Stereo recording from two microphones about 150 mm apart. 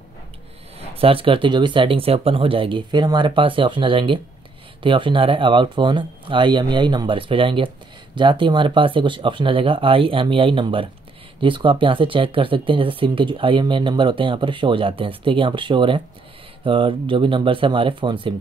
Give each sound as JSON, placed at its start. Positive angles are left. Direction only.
{"t": 0.7, "sound": "speech", "side_deg": -40}